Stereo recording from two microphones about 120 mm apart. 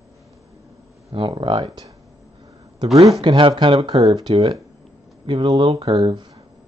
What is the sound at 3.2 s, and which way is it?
Speech, 40° right (ahead or behind).